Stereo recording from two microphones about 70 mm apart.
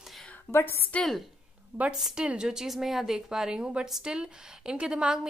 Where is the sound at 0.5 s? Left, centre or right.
Left.